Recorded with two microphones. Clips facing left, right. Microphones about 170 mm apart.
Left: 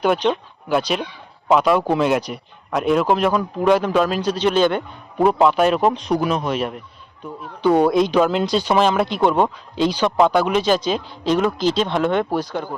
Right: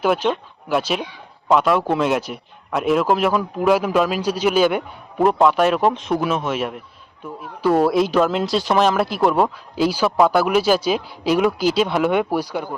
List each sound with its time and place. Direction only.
0.0 s speech: 5° right (ahead or behind)